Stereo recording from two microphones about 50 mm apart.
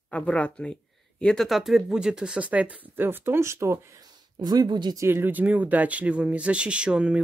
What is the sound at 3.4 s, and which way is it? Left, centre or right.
Speech, right.